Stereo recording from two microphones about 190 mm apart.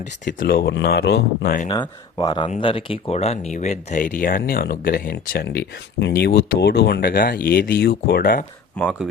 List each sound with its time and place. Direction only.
0.3 s speech: 50° left (ahead or behind)
1.6 s speech: 25° left (ahead or behind); by 8.4 s 50° left (ahead or behind)
8.7 s speech: centre (ahead or behind)